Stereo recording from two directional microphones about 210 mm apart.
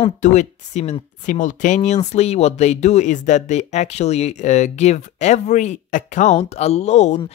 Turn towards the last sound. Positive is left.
turn(degrees=35)  # may be behind; listen again after turning